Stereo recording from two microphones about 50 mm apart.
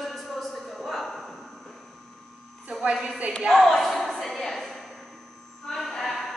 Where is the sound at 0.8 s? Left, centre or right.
Centre.